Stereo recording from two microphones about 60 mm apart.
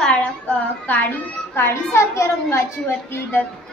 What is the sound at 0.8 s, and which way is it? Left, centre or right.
A woman's voice, left.